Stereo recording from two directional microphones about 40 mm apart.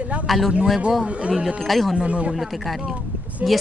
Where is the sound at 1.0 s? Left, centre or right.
Right.